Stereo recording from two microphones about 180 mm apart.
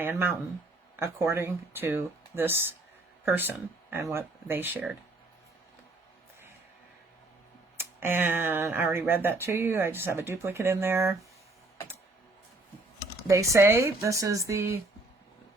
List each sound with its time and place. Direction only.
0.0 s speech: 10° right (ahead or behind)
7.8 s speech: 10° right (ahead or behind)
13.2 s speech: 15° right (ahead or behind)